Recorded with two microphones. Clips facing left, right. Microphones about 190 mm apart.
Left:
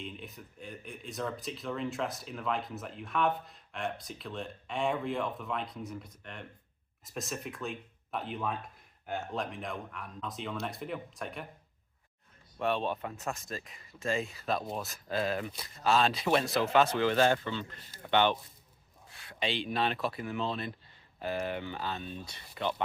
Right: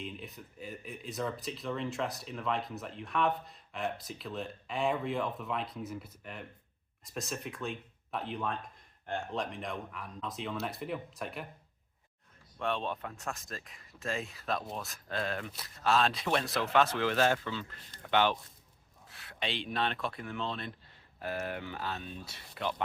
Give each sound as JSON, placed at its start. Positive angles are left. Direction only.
{"t": 0.0, "sound": "speech", "side_deg": 0}
{"t": 12.5, "sound": "speech", "side_deg": 5}